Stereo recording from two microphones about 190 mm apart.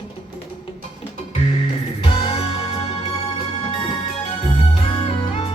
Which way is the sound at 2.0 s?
30° left (ahead or behind).